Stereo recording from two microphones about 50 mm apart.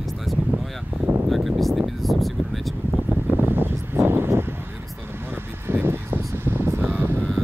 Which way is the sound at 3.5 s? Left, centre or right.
Right.